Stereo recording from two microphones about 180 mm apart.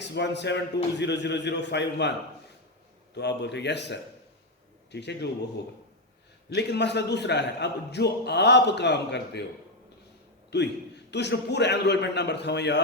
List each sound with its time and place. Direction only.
0.0 s a man's voice: 75° left (ahead or behind)
3.2 s a man's voice: 70° left (ahead or behind)
6.5 s a man's voice: 70° left (ahead or behind)
10.5 s a man's voice: 70° left (ahead or behind)